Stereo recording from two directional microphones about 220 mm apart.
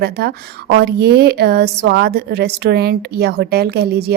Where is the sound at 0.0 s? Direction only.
45° right (ahead or behind).